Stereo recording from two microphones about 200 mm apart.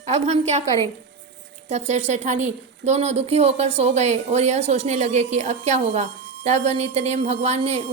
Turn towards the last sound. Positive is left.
turn(degrees=-35)  # may be behind; listen again after turning